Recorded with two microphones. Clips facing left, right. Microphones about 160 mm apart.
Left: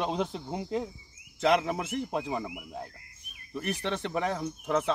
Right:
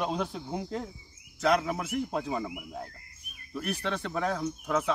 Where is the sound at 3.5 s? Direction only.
20° left (ahead or behind).